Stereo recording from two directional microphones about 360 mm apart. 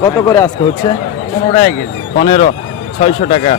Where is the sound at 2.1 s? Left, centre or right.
Centre.